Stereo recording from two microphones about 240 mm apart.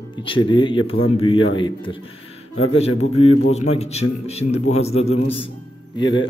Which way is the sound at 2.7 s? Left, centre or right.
Left.